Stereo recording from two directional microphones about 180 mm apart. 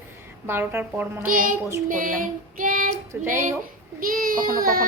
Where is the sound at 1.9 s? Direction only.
50° right (ahead or behind).